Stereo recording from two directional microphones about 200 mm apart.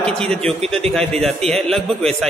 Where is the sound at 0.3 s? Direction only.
5° left (ahead or behind).